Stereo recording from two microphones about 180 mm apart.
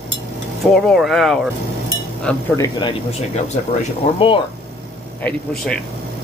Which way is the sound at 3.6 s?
40° left (ahead or behind).